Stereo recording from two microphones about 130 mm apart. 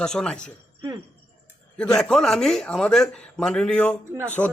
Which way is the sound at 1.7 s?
5° left (ahead or behind).